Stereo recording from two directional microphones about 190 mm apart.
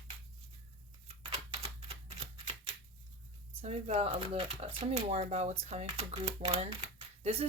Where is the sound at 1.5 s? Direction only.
30° right (ahead or behind).